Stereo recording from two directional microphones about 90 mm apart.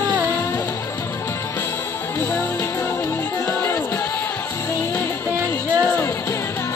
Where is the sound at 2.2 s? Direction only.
25° left (ahead or behind).